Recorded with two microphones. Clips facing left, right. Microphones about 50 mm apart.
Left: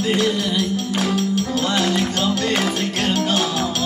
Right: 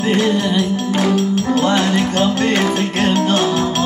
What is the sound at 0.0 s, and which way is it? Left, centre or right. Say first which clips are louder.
Music: right 4 dB; right.